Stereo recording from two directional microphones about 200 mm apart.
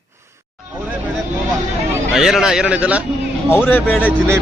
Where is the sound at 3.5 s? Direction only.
10° left (ahead or behind).